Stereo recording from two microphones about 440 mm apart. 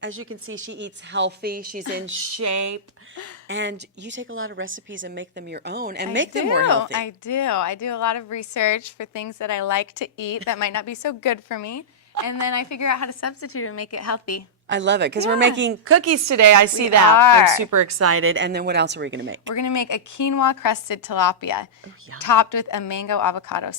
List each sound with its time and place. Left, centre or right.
0.0 s a woman's voice: right
2.0 s a sound: right
3.5 s a woman's voice: right
6.9 s a woman's voice: left
14.7 s a woman's voice: right
19.5 s a woman's voice: left